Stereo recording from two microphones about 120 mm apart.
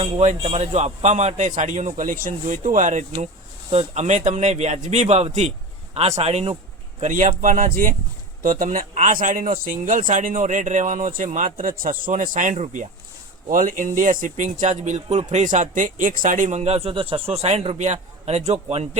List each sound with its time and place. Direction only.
0.0 s speech: 70° right (ahead or behind)
3.7 s a man's voice: 65° right (ahead or behind)
7.0 s speech: 85° right; by 17.7 s 60° right (ahead or behind)
17.7 s a man's voice: 70° right (ahead or behind)